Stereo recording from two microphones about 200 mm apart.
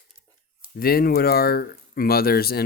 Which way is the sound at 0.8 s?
50° left (ahead or behind).